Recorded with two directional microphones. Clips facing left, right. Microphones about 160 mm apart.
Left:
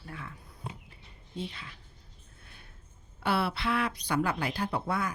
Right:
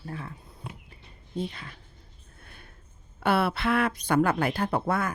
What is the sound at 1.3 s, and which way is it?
Speech, 45° right (ahead or behind).